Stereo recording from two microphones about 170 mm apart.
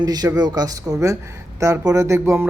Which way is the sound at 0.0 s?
25° right (ahead or behind).